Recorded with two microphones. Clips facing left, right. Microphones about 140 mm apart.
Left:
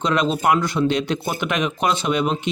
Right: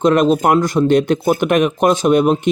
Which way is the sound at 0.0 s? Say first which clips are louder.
Right 7 dB; 50° right (ahead or behind).